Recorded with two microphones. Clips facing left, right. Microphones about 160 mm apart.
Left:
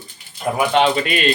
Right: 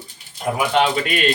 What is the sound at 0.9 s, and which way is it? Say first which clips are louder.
Speech: left 1 dB; centre (ahead or behind).